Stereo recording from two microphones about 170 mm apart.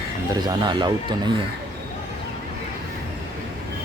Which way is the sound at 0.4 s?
25° right (ahead or behind).